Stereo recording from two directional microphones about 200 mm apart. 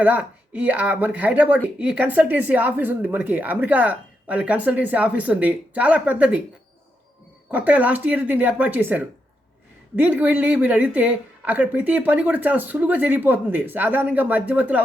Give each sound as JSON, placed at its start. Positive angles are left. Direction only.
{"t": 0.0, "sound": "speech", "side_deg": -5}
{"t": 7.5, "sound": "speech", "side_deg": -5}